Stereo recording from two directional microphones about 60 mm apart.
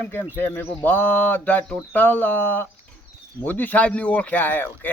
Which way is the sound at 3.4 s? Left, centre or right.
Left.